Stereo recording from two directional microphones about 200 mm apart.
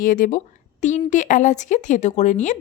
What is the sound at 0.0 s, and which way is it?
A woman's voice, 45° left (ahead or behind).